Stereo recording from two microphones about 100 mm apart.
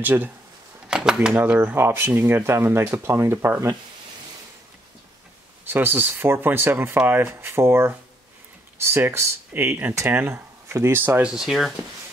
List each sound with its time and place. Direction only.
0.0 s speech: 20° right (ahead or behind)
0.8 s a sound: 5° right (ahead or behind)
1.4 s speech: 15° right (ahead or behind)
5.7 s speech: 20° right (ahead or behind)
11.3 s speech: centre (ahead or behind)